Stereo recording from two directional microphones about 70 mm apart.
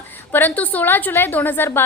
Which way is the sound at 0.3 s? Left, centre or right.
Left.